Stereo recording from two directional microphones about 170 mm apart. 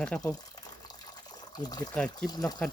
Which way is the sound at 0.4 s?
25° left (ahead or behind).